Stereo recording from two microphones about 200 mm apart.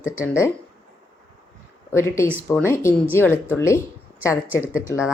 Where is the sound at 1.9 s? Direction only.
15° left (ahead or behind).